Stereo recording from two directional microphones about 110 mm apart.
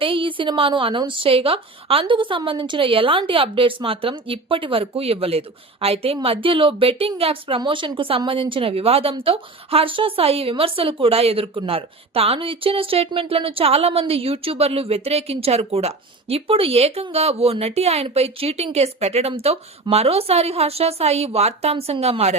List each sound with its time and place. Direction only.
0.0 s a woman's voice: 50° right (ahead or behind)
7.6 s a woman's voice: 50° right (ahead or behind); by 21.9 s 70° right (ahead or behind)